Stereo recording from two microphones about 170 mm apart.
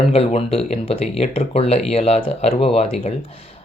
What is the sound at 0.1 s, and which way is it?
Speech, 35° left (ahead or behind).